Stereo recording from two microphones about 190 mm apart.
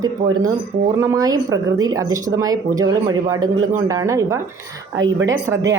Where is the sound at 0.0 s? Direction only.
20° right (ahead or behind).